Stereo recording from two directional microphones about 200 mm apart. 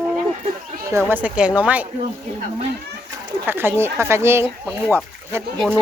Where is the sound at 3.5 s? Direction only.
10° right (ahead or behind).